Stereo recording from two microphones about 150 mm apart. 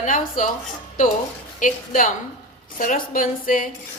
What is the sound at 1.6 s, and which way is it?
A woman's voice, 60° left (ahead or behind).